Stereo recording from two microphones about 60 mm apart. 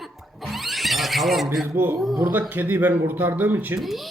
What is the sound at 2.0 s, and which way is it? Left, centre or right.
Speech, centre.